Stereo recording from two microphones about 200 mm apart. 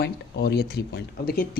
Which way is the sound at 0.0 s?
55° left (ahead or behind).